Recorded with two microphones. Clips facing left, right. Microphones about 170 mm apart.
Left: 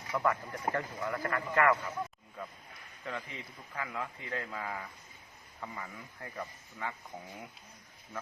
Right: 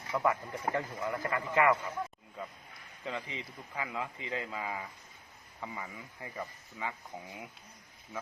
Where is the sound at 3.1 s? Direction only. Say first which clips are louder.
Right 2 dB; 20° right (ahead or behind).